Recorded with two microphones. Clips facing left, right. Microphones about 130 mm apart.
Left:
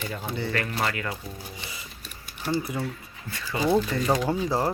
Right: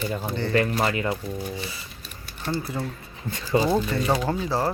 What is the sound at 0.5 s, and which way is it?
Speech, 25° right (ahead or behind).